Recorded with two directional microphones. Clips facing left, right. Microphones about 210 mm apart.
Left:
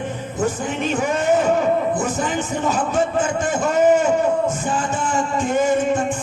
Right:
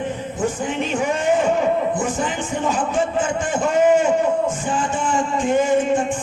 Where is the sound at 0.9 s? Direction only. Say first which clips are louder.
Left 1 dB; 40° left (ahead or behind).